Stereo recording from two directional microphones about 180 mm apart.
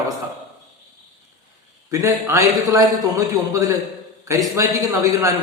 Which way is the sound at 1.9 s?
15° right (ahead or behind).